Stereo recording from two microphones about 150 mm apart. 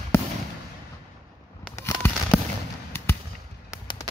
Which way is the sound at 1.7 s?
15° left (ahead or behind).